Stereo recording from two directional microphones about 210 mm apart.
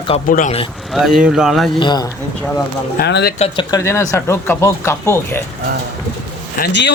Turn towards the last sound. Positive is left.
turn(degrees=50)  # may be behind; listen again after turning